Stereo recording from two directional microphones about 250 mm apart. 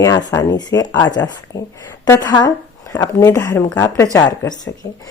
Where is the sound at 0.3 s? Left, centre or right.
Centre.